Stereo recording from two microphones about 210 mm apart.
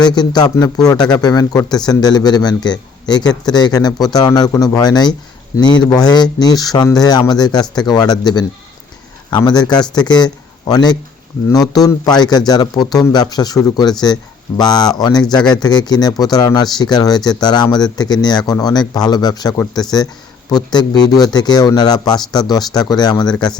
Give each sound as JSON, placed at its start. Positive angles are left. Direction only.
{"t": 0.0, "sound": "speech", "side_deg": 20}